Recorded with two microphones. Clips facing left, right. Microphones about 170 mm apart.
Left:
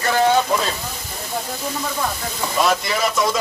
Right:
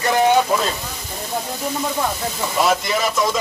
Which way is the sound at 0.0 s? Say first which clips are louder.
Right 1 dB; 20° right (ahead or behind).